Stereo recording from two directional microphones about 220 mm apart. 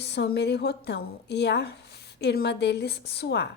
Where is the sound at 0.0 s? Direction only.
50° left (ahead or behind).